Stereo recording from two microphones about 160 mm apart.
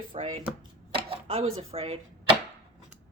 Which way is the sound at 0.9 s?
35° right (ahead or behind).